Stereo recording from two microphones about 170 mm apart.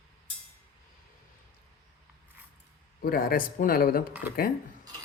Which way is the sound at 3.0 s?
60° left (ahead or behind).